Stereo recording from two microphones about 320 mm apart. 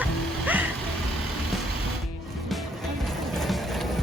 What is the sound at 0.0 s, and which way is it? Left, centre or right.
Music, centre.